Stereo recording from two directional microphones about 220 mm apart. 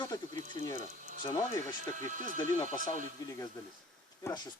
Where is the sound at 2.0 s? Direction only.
35° right (ahead or behind).